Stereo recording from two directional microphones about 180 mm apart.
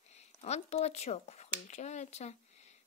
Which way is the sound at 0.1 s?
35° left (ahead or behind).